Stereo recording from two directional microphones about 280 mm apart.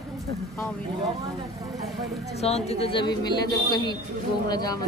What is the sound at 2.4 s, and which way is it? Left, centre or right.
A man's voice, left.